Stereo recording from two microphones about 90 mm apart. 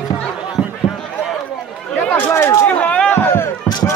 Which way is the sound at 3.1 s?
25° left (ahead or behind).